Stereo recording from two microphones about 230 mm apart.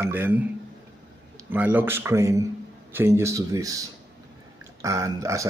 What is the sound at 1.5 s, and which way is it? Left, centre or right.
A man's voice, centre.